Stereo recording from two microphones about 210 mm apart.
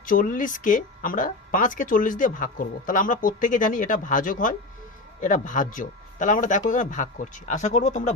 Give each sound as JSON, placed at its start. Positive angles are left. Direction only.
{"t": 0.0, "sound": "speech", "side_deg": 40}